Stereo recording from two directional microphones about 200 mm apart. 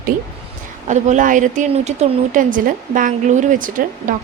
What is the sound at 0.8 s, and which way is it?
Speech, 35° right (ahead or behind).